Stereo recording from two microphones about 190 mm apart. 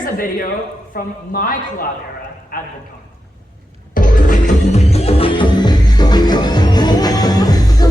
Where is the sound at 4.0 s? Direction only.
45° left (ahead or behind).